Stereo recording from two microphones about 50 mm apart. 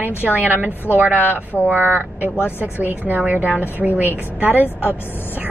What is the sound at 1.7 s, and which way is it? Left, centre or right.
A woman's voice, right.